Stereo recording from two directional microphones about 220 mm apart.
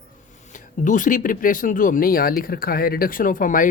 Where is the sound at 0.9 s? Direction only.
35° left (ahead or behind).